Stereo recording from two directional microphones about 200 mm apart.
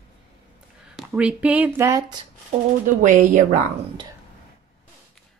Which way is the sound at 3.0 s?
40° right (ahead or behind).